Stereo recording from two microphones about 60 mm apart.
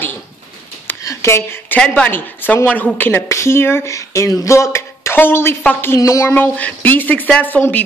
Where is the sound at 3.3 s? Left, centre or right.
Left.